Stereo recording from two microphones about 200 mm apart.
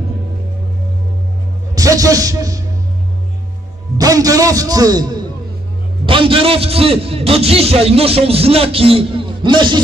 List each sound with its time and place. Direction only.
1.8 s speech: 15° right (ahead or behind)
4.0 s a man's voice: 15° right (ahead or behind)